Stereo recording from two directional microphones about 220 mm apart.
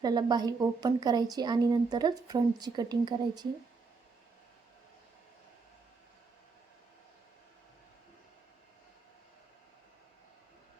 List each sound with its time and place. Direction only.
0.0 s a woman's voice: 20° right (ahead or behind)